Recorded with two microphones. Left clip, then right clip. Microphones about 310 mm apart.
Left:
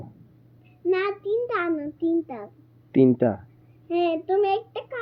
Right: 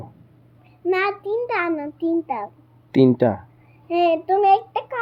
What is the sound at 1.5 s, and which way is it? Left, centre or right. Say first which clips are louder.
Speech: right 3 dB; centre.